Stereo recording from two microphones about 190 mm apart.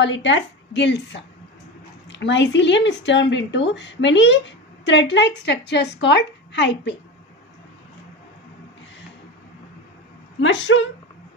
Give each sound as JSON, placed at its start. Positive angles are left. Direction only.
{"t": 0.0, "sound": "speech", "side_deg": 70}
{"t": 10.4, "sound": "speech", "side_deg": 70}